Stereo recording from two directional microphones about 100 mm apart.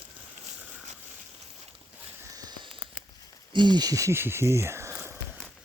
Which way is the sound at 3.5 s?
45° right (ahead or behind).